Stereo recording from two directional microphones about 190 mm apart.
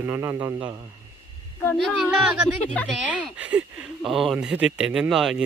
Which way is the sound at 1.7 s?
Centre (ahead or behind).